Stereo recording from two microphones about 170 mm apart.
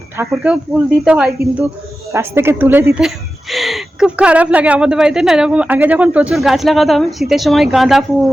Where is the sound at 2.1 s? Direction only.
15° right (ahead or behind).